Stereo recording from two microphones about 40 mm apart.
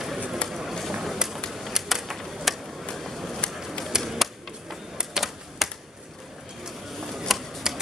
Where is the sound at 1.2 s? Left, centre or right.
Centre.